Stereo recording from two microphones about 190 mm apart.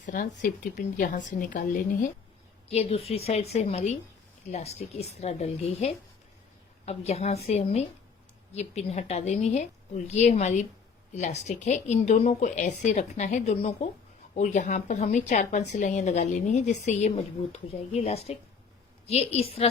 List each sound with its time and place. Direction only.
0.0 s speech: 45° left (ahead or behind)
2.6 s a woman's voice: 30° left (ahead or behind)